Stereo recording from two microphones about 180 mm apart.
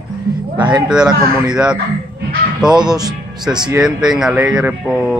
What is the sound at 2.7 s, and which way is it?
Speech, 25° right (ahead or behind).